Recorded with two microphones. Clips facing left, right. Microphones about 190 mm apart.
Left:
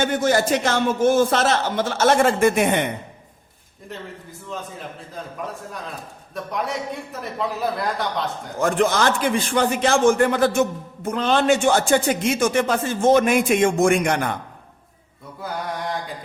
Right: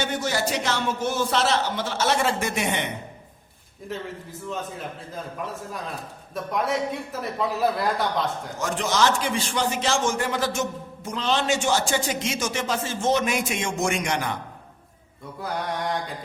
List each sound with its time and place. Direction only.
0.0 s a man's voice: 50° left (ahead or behind)
3.9 s a man's voice: centre (ahead or behind)
6.3 s a man's voice: centre (ahead or behind)
8.5 s a man's voice: 55° left (ahead or behind)
15.4 s a man's voice: centre (ahead or behind)